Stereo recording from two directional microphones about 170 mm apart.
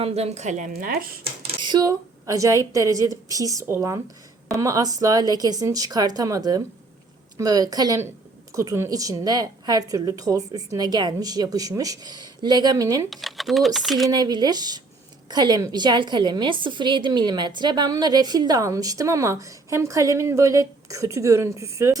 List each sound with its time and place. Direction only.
0.0 s a woman's voice: 40° right (ahead or behind)
0.7 s speech: 60° right (ahead or behind)
1.2 s a woman's voice: 25° right (ahead or behind)
13.1 s speech: centre (ahead or behind)
14.1 s a woman's voice: 25° right (ahead or behind)